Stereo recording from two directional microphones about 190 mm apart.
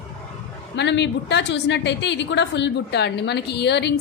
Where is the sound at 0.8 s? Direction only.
65° left (ahead or behind).